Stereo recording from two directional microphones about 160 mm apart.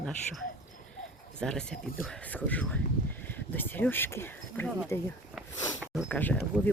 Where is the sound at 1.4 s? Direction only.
5° left (ahead or behind).